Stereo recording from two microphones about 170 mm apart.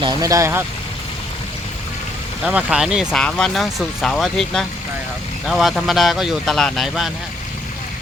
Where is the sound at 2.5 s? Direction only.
5° right (ahead or behind).